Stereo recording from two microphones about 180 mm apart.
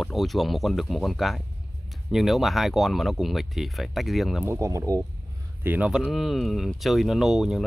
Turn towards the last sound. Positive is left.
turn(degrees=0)  # may be behind; listen again after turning